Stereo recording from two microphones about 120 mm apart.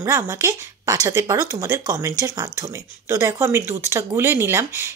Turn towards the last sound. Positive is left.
turn(degrees=-20)  # may be behind; listen again after turning